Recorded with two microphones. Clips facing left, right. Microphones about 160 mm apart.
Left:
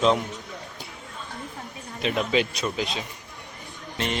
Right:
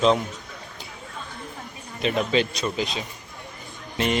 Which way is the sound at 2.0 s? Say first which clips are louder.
Right 1 dB; centre (ahead or behind).